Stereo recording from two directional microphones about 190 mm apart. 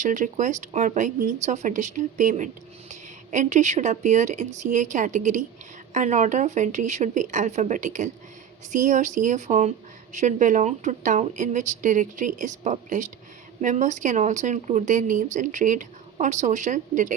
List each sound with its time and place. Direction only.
0.0 s speech: 40° right (ahead or behind)